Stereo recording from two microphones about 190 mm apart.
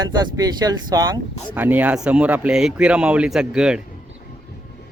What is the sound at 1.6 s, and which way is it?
A man's voice, 10° right (ahead or behind).